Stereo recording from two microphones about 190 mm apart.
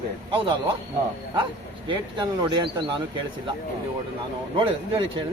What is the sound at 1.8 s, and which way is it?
A man's voice, 25° right (ahead or behind).